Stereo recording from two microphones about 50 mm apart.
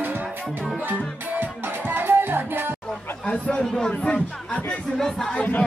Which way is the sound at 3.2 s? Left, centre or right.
Left.